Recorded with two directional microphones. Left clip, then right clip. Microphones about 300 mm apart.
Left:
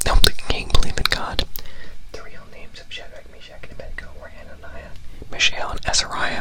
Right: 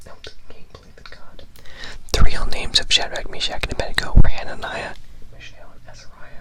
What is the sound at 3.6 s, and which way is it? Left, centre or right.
Speech, right.